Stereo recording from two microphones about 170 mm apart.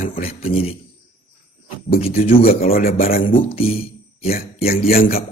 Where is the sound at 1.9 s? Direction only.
35° left (ahead or behind).